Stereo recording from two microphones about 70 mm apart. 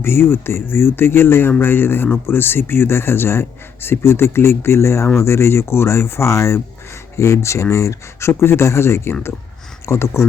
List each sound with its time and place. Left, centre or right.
0.0 s a man's voice: left